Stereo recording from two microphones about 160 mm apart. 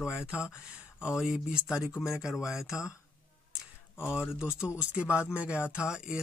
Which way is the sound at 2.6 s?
20° left (ahead or behind).